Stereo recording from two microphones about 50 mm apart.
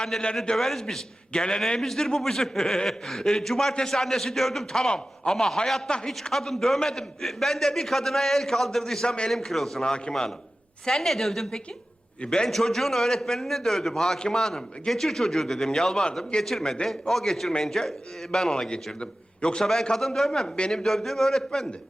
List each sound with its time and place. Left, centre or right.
0.0 s a man's voice: centre
1.3 s a man's voice: centre
6.2 s a man's voice: centre
9.3 s a woman's voice: centre
9.8 s a man's voice: centre
12.2 s a man's voice: centre